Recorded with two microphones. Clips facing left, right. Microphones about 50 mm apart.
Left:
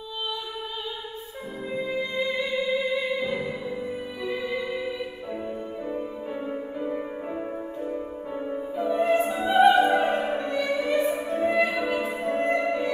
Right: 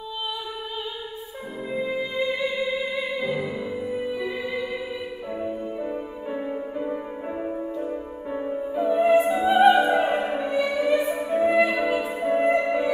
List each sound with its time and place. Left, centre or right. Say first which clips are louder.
1.7 s music: right 2 dB; centre
11.6 s music: right 3 dB; right
11.9 s music: right 3 dB; centre